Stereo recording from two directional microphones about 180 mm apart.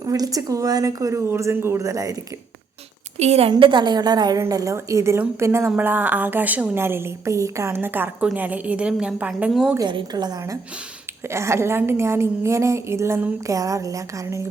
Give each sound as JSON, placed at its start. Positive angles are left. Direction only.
{"t": 0.0, "sound": "a woman's voice", "side_deg": -20}
{"t": 3.2, "sound": "a woman's voice", "side_deg": -35}
{"t": 9.7, "sound": "a woman's voice", "side_deg": -25}